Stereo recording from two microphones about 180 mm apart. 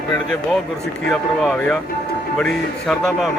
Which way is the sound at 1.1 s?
Centre (ahead or behind).